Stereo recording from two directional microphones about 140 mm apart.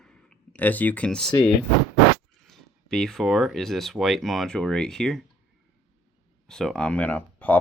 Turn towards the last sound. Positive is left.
turn(degrees=10)  # may be behind; listen again after turning